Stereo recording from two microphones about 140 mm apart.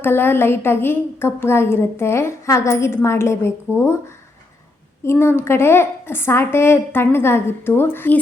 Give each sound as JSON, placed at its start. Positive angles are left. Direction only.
{"t": 0.0, "sound": "a woman's voice", "side_deg": 15}
{"t": 5.0, "sound": "a woman's voice", "side_deg": 15}